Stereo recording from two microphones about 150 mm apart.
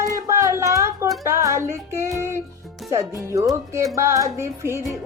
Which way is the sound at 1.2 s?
20° right (ahead or behind).